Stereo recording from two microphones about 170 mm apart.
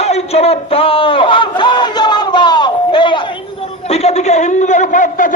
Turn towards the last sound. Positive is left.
turn(degrees=50)  # may be behind; listen again after turning